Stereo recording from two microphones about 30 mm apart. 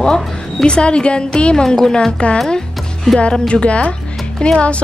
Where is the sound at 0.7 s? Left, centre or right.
Left.